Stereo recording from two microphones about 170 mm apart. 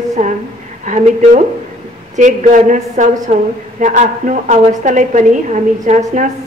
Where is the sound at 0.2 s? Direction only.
45° right (ahead or behind).